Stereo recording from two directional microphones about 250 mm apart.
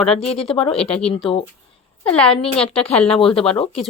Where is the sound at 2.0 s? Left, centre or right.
Centre.